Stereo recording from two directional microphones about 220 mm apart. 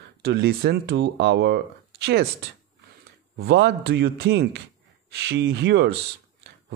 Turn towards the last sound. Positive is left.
turn(degrees=-50)  # may be behind; listen again after turning